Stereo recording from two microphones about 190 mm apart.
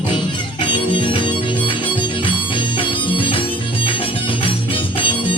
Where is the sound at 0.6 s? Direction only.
25° left (ahead or behind).